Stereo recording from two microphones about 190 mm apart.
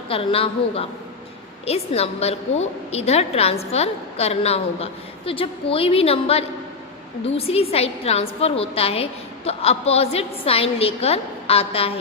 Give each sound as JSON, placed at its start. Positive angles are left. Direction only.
{"t": 0.1, "sound": "a woman's voice", "side_deg": 30}